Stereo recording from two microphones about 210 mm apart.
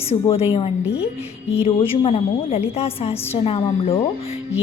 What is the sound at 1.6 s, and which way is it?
A woman's voice, 25° left (ahead or behind).